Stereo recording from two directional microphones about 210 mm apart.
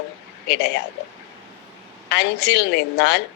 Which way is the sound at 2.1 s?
55° left (ahead or behind).